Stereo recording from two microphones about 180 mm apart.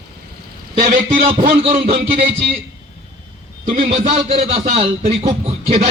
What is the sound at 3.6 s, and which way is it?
A man's voice, 35° right (ahead or behind).